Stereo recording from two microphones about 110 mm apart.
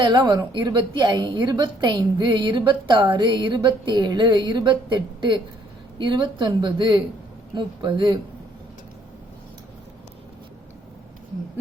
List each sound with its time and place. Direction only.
0.0 s a woman's voice: 40° right (ahead or behind)